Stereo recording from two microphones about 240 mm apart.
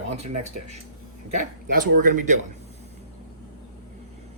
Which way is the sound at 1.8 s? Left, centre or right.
Right.